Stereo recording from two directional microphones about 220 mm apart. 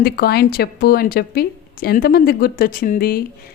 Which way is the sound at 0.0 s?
45° left (ahead or behind).